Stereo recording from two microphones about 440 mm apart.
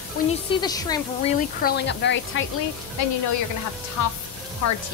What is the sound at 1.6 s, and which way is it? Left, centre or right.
Speech, left.